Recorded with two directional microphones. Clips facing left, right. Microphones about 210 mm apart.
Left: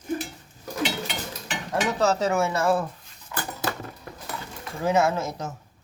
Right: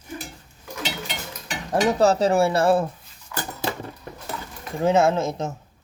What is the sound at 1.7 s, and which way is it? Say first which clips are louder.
Speech: right 5 dB; 35° right (ahead or behind).